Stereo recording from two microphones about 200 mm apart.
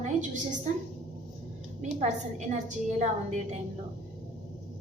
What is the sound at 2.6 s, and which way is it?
Speech, 35° right (ahead or behind).